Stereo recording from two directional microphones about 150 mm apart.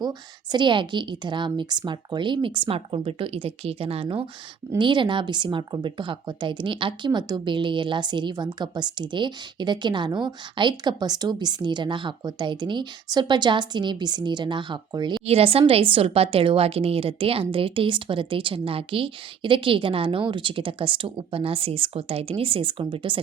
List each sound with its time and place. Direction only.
0.0 s speech: 30° right (ahead or behind)